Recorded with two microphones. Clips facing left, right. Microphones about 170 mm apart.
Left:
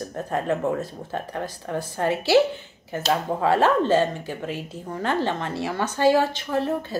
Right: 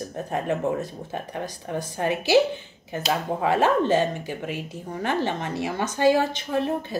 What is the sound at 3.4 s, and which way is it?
A woman's voice, 15° right (ahead or behind).